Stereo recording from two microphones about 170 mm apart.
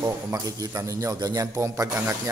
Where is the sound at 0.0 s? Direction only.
20° right (ahead or behind).